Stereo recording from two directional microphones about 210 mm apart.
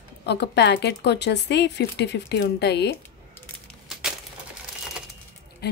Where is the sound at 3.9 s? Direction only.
5° right (ahead or behind).